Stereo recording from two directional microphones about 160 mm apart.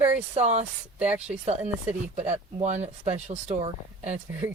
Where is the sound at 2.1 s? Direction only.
45° right (ahead or behind).